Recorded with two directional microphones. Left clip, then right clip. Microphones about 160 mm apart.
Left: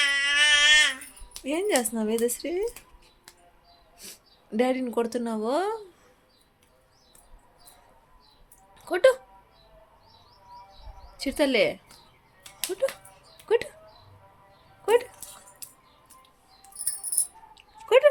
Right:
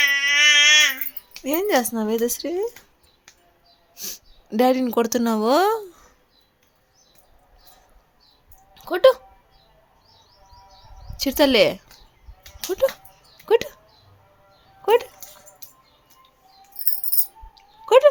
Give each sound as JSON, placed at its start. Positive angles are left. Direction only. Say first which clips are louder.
{"t": 0.0, "sound": "a sound", "louder": "right 5 dB", "side_deg": 10}
{"t": 1.5, "sound": "speech", "louder": "right 5 dB", "side_deg": -25}
{"t": 3.9, "sound": "speech", "louder": "right 12 dB", "side_deg": -30}
{"t": 8.7, "sound": "a sound", "louder": "right 5 dB", "side_deg": -20}
{"t": 11.2, "sound": "speech", "louder": "right 7 dB", "side_deg": -35}
{"t": 12.8, "sound": "speech", "louder": "right 8 dB", "side_deg": -35}
{"t": 14.8, "sound": "speech", "louder": "right 4 dB", "side_deg": -30}
{"t": 17.8, "sound": "speech", "louder": "right 5 dB", "side_deg": -40}